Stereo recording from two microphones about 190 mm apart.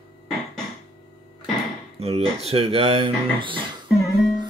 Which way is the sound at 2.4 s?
30° right (ahead or behind).